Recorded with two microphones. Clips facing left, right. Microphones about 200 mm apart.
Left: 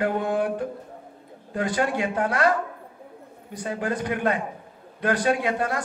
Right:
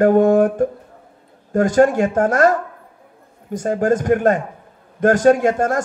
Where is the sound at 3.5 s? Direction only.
45° right (ahead or behind).